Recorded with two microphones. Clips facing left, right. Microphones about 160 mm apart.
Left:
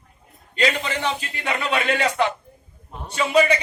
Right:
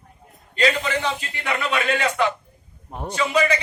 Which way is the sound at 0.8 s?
30° left (ahead or behind).